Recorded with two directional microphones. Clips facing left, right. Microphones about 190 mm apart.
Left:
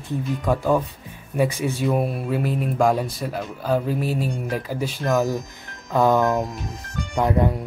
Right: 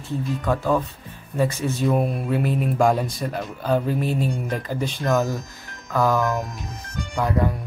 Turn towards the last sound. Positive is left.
turn(degrees=20)  # may be behind; listen again after turning